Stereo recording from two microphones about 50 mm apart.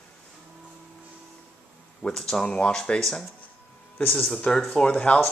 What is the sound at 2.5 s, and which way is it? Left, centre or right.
Speech, centre.